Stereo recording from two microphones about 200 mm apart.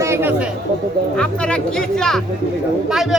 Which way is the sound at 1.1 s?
5° left (ahead or behind).